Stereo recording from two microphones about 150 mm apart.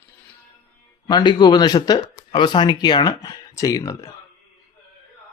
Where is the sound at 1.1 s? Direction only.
30° left (ahead or behind).